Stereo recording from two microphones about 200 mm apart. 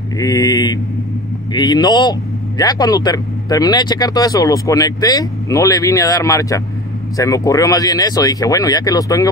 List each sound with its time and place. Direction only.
0.2 s speech: 20° left (ahead or behind)